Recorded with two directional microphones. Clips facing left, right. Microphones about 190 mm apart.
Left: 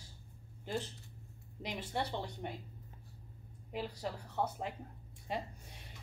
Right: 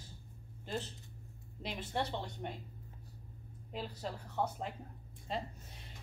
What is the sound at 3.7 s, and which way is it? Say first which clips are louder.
Speech: left 2 dB; 10° left (ahead or behind).